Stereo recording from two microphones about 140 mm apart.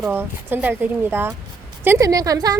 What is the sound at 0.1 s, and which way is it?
A woman's voice, 15° right (ahead or behind).